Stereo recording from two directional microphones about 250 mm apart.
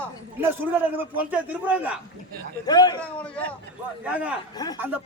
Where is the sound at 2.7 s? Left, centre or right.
Centre.